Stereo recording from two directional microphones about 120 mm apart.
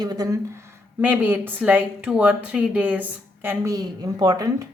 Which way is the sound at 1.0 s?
15° right (ahead or behind).